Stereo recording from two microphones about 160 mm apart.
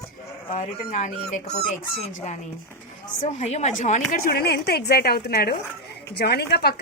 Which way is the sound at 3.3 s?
45° left (ahead or behind).